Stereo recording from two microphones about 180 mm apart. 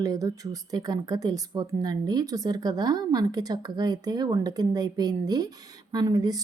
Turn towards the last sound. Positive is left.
turn(degrees=-20)  # may be behind; listen again after turning